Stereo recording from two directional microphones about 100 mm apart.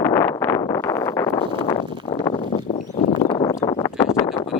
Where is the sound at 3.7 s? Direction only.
40° left (ahead or behind).